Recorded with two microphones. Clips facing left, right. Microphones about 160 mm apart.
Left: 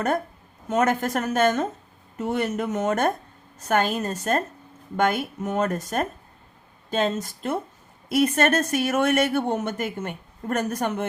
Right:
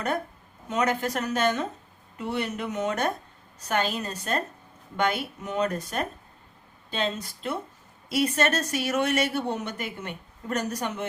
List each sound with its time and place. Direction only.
0.7 s speech: 50° left (ahead or behind)